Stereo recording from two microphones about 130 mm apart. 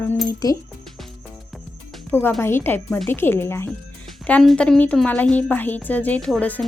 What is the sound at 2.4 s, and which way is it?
Speech, 20° left (ahead or behind).